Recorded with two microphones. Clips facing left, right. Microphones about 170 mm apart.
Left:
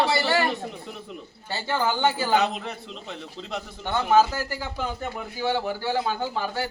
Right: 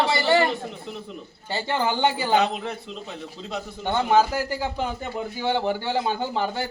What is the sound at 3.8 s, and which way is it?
A man's voice, 15° right (ahead or behind).